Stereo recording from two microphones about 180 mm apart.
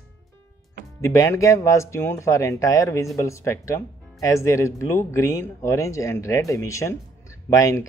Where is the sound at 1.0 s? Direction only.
15° left (ahead or behind).